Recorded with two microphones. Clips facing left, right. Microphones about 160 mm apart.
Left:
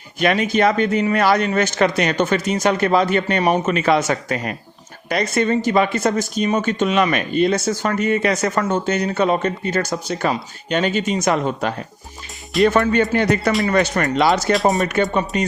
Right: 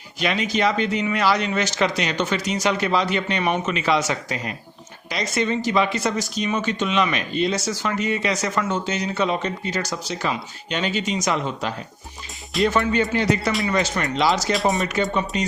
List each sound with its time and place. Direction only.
0.2 s speech: 55° left (ahead or behind)
14.5 s speech: centre (ahead or behind)
14.8 s speech: 55° left (ahead or behind)